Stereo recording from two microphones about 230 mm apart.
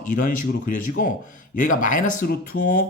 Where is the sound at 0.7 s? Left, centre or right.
Left.